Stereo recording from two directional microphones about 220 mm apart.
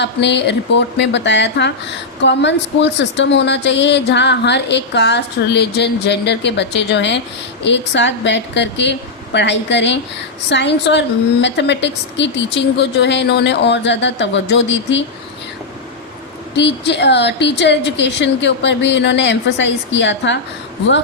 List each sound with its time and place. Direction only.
0.0 s speech: 50° left (ahead or behind)
16.6 s speech: 50° left (ahead or behind)